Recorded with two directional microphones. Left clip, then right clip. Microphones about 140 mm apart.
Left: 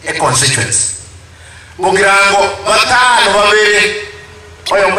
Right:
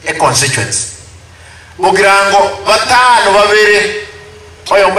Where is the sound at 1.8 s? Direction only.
30° right (ahead or behind).